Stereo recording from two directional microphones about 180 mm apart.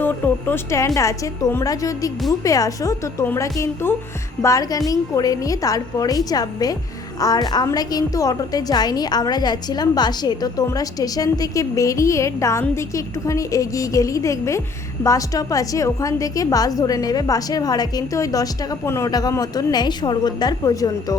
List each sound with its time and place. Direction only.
0.0 s a woman's voice: 10° left (ahead or behind)